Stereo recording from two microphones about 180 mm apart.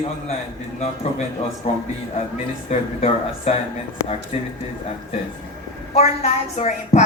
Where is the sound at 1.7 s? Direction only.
40° left (ahead or behind).